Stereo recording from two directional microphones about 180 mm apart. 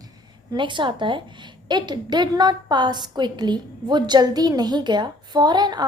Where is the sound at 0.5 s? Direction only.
25° right (ahead or behind).